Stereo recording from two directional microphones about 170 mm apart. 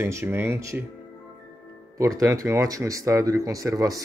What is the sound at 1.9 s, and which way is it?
Speech, 20° right (ahead or behind).